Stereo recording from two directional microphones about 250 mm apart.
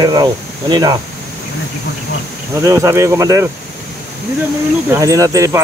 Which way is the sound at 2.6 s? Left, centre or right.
Centre.